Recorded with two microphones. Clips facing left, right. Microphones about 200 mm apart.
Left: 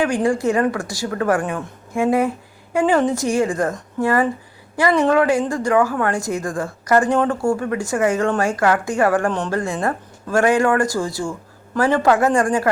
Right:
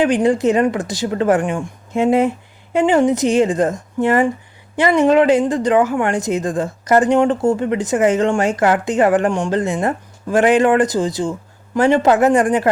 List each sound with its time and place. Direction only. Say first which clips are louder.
0.0 s a woman's voice: right 4 dB; 20° right (ahead or behind)